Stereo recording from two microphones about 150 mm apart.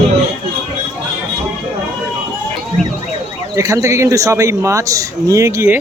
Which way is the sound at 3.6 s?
20° right (ahead or behind).